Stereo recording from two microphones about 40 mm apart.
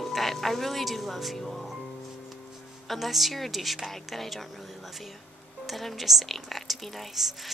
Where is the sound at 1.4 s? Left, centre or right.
Centre.